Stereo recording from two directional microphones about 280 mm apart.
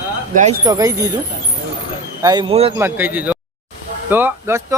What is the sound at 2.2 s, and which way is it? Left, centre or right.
Speech, centre.